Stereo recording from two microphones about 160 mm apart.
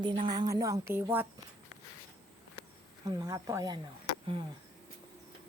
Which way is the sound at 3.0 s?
25° right (ahead or behind).